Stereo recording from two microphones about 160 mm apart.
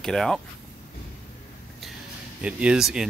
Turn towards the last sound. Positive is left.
turn(degrees=-5)  # may be behind; listen again after turning